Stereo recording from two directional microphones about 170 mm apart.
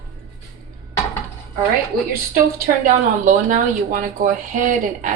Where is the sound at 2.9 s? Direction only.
50° right (ahead or behind).